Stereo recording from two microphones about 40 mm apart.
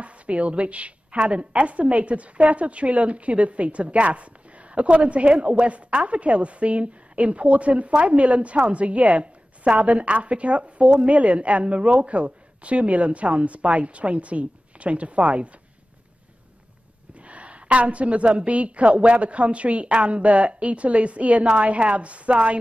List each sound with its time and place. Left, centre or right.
0.0 s a woman's voice: right
17.1 s a woman's voice: right